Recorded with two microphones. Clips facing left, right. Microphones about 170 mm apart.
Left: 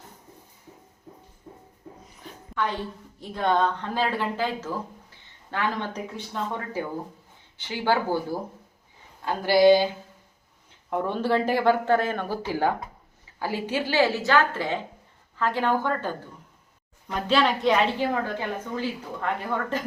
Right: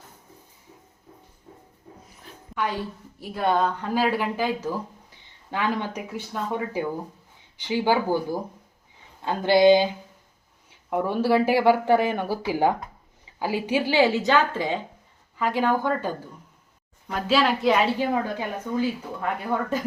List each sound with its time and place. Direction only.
2.1 s a woman's voice: 5° right (ahead or behind)
10.8 s a woman's voice: 10° right (ahead or behind)